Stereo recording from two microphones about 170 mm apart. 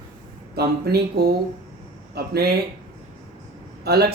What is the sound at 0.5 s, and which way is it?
Speech, 70° right (ahead or behind).